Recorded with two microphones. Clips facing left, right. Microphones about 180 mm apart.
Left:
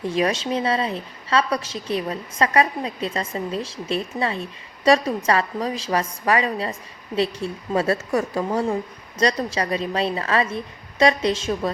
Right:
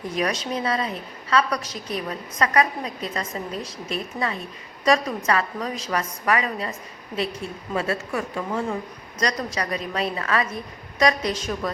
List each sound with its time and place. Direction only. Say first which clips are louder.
0.1 s a woman's voice: left 3 dB; 25° left (ahead or behind)